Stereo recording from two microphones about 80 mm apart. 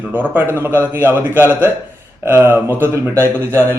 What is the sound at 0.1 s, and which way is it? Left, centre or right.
A man's voice, right.